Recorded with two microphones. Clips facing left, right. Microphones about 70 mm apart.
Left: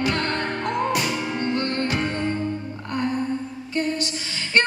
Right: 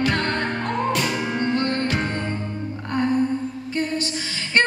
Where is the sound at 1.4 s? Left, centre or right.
Right.